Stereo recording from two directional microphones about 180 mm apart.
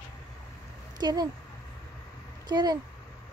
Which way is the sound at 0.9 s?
25° right (ahead or behind).